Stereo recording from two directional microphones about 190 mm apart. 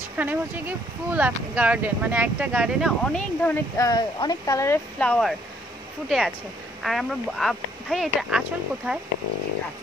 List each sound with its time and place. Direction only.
0.2 s speech: 10° right (ahead or behind)
3.0 s speech: 5° left (ahead or behind)
3.7 s speech: 20° left (ahead or behind); by 9.0 s 5° right (ahead or behind)